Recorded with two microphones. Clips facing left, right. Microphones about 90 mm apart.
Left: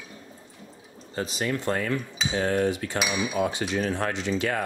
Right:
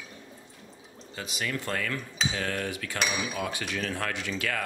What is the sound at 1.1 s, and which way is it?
Speech, 35° left (ahead or behind).